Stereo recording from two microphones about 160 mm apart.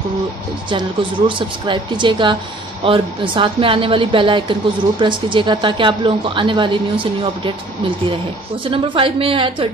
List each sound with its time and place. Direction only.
0.7 s a woman's voice: 30° right (ahead or behind)
8.6 s a woman's voice: 30° right (ahead or behind)